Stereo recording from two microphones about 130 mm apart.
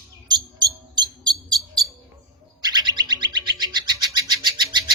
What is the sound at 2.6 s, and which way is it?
Bird, 35° right (ahead or behind).